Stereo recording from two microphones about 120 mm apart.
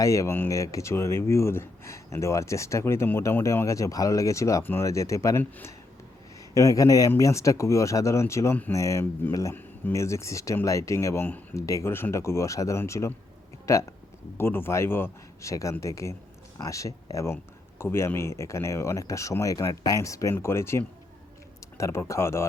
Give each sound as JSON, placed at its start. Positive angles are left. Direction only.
{"t": 0.0, "sound": "speech", "side_deg": 25}